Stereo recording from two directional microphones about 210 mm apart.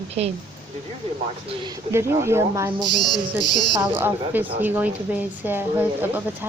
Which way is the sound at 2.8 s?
20° left (ahead or behind).